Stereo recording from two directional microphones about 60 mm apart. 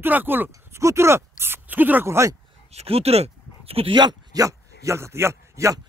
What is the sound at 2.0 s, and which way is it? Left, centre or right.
Speech, right.